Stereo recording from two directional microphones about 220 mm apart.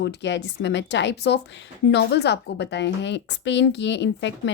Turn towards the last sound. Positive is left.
turn(degrees=55)  # may be behind; listen again after turning